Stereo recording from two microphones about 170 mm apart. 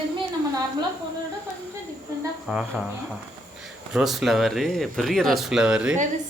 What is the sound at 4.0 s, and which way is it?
Speech, centre (ahead or behind).